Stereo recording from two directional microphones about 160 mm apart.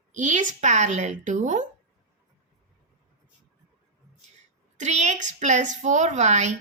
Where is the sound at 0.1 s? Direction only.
50° right (ahead or behind).